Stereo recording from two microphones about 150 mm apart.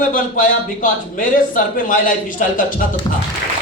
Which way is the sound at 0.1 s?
60° left (ahead or behind).